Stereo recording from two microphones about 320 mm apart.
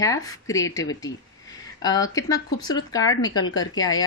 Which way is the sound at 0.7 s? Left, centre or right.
Centre.